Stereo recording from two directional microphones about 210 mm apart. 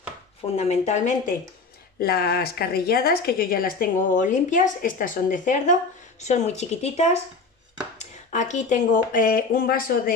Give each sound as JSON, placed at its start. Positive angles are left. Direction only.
{"t": 0.4, "sound": "speech", "side_deg": 30}
{"t": 2.0, "sound": "a woman's voice", "side_deg": 50}